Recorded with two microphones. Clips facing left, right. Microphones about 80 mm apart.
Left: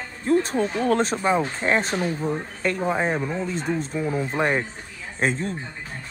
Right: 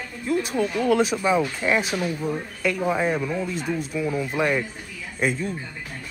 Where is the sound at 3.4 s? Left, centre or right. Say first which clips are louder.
Left 1 dB; centre.